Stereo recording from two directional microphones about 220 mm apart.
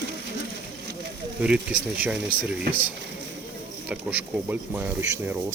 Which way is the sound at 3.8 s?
5° right (ahead or behind).